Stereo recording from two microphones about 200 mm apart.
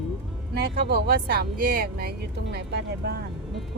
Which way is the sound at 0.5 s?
55° right (ahead or behind).